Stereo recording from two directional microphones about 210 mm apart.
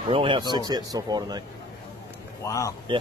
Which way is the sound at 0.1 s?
25° right (ahead or behind).